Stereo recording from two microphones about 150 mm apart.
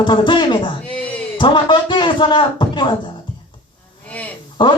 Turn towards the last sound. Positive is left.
turn(degrees=30)  # may be behind; listen again after turning